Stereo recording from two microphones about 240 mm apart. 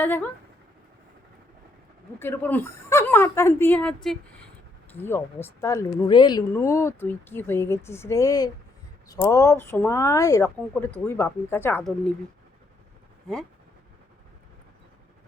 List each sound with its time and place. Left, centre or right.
0.0 s speech: centre
2.1 s speech: centre